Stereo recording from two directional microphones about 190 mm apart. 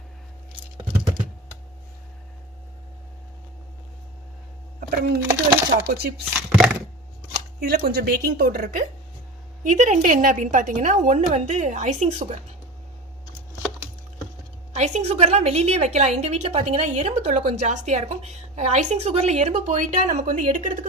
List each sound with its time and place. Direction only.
4.8 s a sound: 50° right (ahead or behind)
5.9 s speech: 55° right (ahead or behind)
6.5 s a sound: centre (ahead or behind)
7.6 s a woman's voice: 55° right (ahead or behind)
9.6 s a woman's voice: 40° right (ahead or behind)
14.7 s a woman's voice: 35° right (ahead or behind)